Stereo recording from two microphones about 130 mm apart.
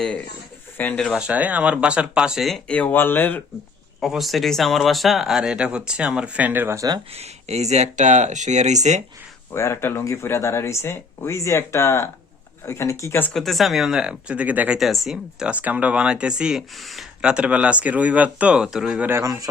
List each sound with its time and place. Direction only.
0.8 s speech: 10° left (ahead or behind)
1.1 s speech: 10° right (ahead or behind)
2.7 s speech: 15° left (ahead or behind)
4.0 s speech: centre (ahead or behind); by 7.0 s 25° right (ahead or behind)
7.1 s speech: 55° right (ahead or behind)
9.5 s speech: 20° left (ahead or behind)
13.3 s speech: centre (ahead or behind)
14.8 s speech: centre (ahead or behind)
19.0 s speech: 20° right (ahead or behind)